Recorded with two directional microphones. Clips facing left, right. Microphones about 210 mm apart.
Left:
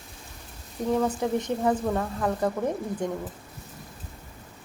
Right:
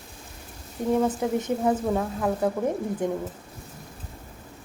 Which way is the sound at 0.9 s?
5° right (ahead or behind).